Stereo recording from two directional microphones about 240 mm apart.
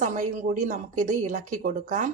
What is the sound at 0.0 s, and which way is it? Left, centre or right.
A woman's voice, right.